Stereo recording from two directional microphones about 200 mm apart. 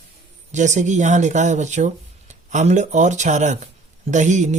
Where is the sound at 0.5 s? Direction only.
35° right (ahead or behind).